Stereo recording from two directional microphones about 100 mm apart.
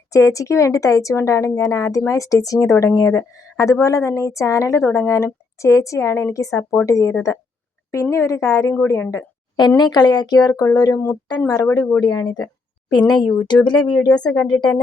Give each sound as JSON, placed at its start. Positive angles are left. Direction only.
{"t": 0.1, "sound": "speech", "side_deg": 35}
{"t": 9.6, "sound": "speech", "side_deg": 45}